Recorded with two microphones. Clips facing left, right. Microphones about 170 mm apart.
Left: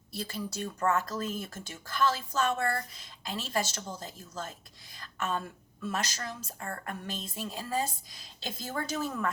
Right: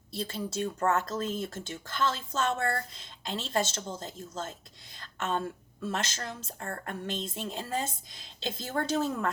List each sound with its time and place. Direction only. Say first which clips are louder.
0.1 s speech: right 2 dB; 25° right (ahead or behind)